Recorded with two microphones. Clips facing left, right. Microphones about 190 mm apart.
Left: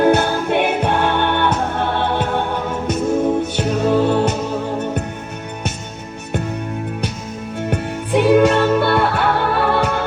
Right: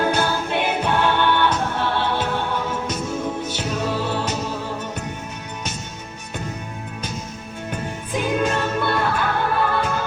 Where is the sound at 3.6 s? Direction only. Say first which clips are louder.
Left 8 dB; 55° left (ahead or behind).